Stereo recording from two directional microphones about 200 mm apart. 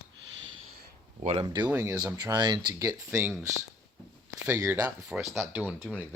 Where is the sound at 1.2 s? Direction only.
25° right (ahead or behind).